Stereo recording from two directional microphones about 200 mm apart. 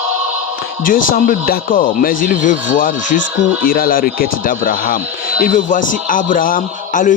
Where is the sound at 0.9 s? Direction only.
45° left (ahead or behind).